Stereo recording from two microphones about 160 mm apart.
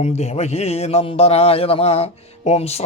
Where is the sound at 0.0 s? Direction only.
45° left (ahead or behind).